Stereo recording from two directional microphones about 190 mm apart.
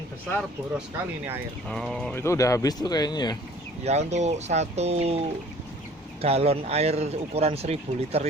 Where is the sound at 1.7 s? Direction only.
Centre (ahead or behind).